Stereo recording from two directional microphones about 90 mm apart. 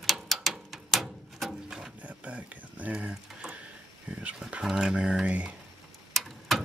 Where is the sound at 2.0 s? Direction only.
15° right (ahead or behind).